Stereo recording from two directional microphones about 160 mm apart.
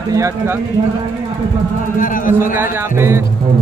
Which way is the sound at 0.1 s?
20° right (ahead or behind).